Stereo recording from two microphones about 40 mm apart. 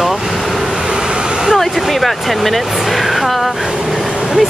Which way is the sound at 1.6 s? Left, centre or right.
Centre.